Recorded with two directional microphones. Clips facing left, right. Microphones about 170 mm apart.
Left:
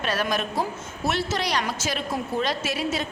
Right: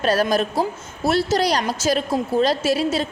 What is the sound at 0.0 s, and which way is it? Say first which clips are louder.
A woman's voice: right 7 dB; 35° right (ahead or behind).